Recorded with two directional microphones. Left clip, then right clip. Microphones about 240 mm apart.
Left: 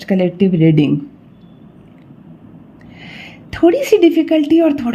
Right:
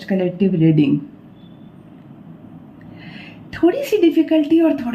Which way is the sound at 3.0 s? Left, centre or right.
Left.